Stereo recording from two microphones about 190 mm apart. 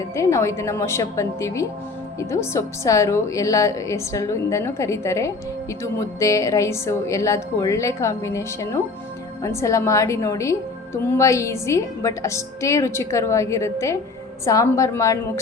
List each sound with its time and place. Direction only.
0.0 s a woman's voice: 15° left (ahead or behind)